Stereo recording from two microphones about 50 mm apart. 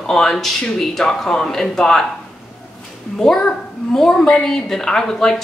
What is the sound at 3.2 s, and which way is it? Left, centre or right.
A child's voice, centre.